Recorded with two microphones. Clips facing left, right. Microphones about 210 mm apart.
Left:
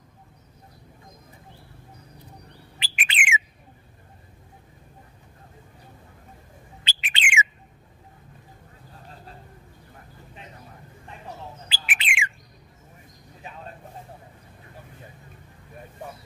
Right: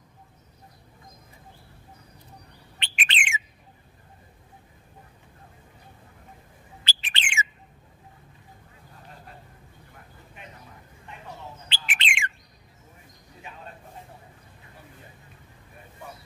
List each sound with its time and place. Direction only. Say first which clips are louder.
2.8 s bird: left 1 dB; 5° left (ahead or behind)
6.9 s bird: left 4 dB; 15° left (ahead or behind)
11.7 s bird: even; 5° left (ahead or behind)